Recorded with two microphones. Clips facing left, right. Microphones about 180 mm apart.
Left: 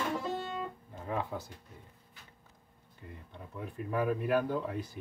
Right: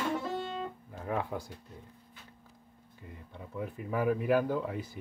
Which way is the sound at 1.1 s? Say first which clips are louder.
Right 2 dB; 10° right (ahead or behind).